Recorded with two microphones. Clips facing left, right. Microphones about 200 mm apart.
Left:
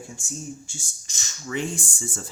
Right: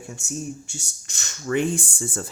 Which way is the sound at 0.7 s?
65° right (ahead or behind).